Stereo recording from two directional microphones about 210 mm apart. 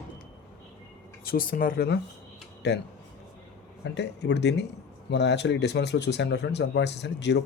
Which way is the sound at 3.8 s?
55° left (ahead or behind).